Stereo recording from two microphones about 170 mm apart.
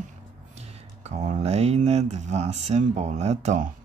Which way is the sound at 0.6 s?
40° right (ahead or behind).